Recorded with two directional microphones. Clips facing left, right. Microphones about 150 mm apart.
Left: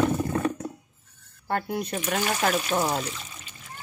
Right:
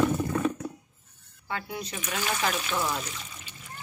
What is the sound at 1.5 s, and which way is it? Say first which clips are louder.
Speech: left 7 dB; 55° left (ahead or behind).